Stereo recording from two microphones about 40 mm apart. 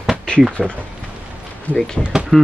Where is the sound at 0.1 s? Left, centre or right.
Centre.